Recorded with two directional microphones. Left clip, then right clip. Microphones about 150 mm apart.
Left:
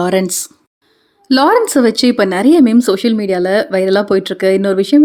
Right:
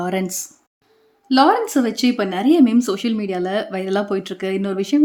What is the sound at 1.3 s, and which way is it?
A woman's voice, 50° left (ahead or behind).